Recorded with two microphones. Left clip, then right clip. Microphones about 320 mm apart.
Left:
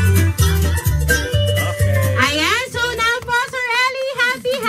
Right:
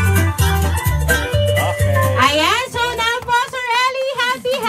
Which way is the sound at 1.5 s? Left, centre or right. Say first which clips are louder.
Right 3 dB; right.